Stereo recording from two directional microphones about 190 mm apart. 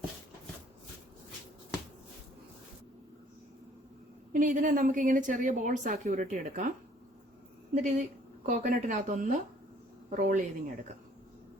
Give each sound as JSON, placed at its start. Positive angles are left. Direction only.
{"t": 4.3, "sound": "a woman's voice", "side_deg": -45}